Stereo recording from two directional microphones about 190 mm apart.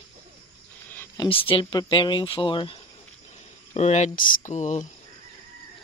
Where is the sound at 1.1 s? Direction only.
25° left (ahead or behind).